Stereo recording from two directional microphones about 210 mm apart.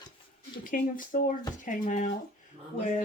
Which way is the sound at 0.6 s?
40° left (ahead or behind).